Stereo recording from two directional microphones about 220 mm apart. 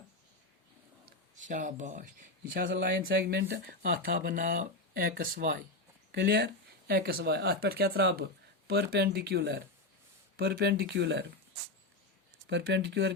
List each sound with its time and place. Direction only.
1.0 s speech: 35° right (ahead or behind); by 11.3 s 50° right (ahead or behind)
12.5 s speech: 55° right (ahead or behind)